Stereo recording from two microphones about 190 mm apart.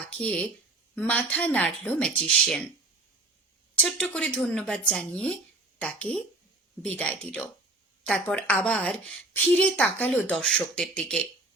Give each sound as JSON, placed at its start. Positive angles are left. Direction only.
{"t": 0.1, "sound": "speech", "side_deg": 5}
{"t": 3.8, "sound": "speech", "side_deg": 5}